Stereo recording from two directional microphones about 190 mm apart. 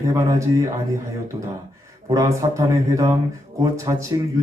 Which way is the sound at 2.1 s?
15° right (ahead or behind).